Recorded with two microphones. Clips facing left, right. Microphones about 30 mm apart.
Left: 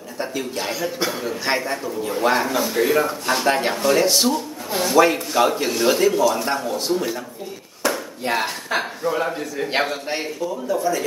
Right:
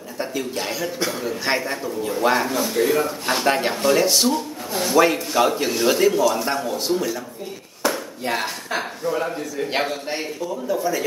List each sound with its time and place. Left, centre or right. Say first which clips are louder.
0.2 s a man's voice: even; centre
10.4 s speech: left 1 dB; centre